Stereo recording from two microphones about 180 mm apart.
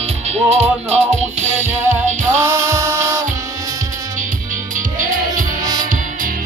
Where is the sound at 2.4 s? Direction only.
15° right (ahead or behind).